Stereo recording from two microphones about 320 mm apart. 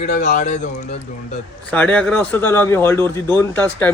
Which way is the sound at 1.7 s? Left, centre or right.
Centre.